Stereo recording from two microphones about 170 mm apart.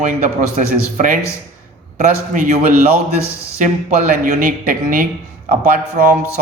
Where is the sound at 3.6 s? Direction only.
45° right (ahead or behind).